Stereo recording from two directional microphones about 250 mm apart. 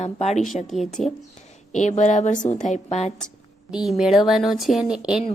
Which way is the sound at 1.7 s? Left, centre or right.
Left.